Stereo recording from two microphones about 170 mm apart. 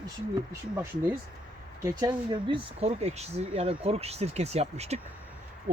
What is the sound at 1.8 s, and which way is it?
Speech, 25° right (ahead or behind).